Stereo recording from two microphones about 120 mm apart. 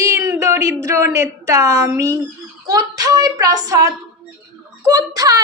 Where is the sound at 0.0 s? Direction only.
25° right (ahead or behind).